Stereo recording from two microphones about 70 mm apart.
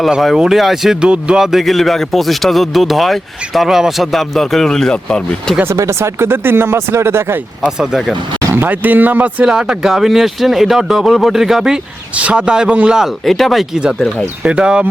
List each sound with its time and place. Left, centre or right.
0.3 s speech: centre
5.7 s speech: right
7.8 s speech: centre
8.5 s speech: right
9.4 s speech: centre
12.1 s a man's voice: centre
13.2 s speech: centre
14.4 s a man's voice: centre